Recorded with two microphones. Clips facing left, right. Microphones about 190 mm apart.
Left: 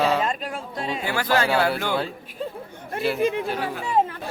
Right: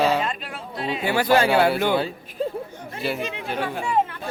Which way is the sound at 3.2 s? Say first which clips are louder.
Left 8 dB; 50° left (ahead or behind).